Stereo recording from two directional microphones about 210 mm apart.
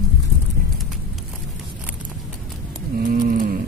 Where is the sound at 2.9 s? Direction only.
45° right (ahead or behind).